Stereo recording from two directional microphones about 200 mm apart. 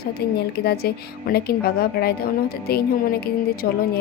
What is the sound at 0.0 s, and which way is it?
Speech, 50° left (ahead or behind).